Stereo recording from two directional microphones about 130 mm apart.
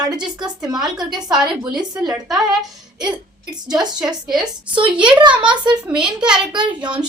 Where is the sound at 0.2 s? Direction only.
35° right (ahead or behind).